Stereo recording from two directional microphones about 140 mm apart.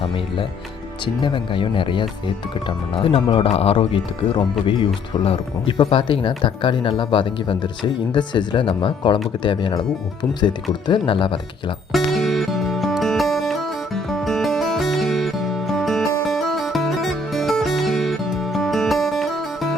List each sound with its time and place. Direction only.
1.0 s speech: 35° left (ahead or behind)
11.9 s music: centre (ahead or behind)